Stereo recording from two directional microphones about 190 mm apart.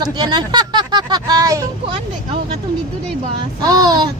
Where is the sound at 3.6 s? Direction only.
20° right (ahead or behind).